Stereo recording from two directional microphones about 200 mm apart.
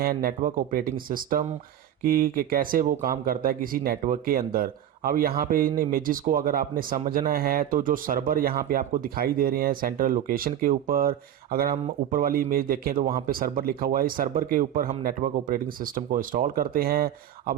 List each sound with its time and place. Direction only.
0.0 s speech: 45° right (ahead or behind)
12.1 s speech: 45° right (ahead or behind)